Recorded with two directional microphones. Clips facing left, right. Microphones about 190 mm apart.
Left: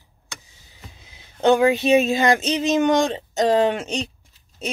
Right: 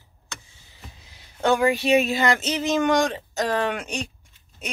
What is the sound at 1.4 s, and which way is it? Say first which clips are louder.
Speech: left 4 dB; 20° left (ahead or behind).